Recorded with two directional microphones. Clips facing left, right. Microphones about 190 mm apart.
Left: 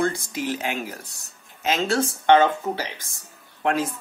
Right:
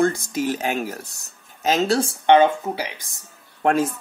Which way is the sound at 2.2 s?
15° right (ahead or behind).